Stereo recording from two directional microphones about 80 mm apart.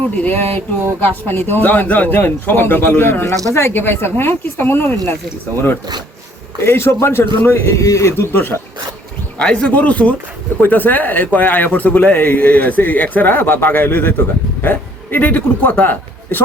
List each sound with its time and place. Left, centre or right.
0.2 s a man's voice: left
6.6 s a man's voice: left
9.4 s a man's voice: centre